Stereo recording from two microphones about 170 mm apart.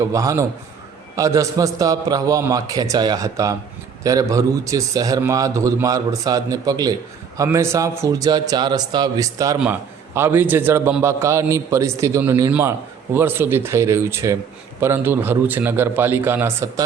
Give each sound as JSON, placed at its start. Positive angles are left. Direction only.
{"t": 0.0, "sound": "a man's voice", "side_deg": -20}